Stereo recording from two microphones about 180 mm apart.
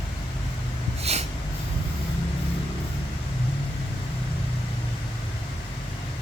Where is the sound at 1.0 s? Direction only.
35° right (ahead or behind).